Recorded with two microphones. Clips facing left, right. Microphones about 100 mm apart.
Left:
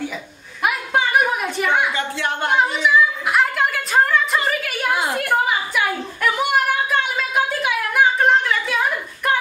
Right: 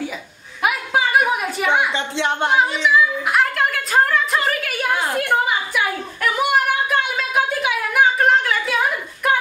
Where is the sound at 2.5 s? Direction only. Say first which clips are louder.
Left 2 dB; centre (ahead or behind).